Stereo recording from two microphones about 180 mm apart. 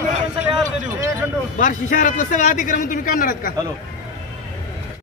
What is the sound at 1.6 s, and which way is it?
A man's voice, 45° left (ahead or behind).